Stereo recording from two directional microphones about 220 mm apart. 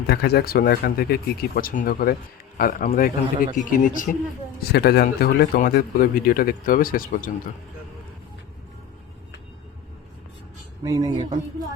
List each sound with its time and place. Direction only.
0.1 s speech: 45° left (ahead or behind)
10.8 s speech: 15° right (ahead or behind)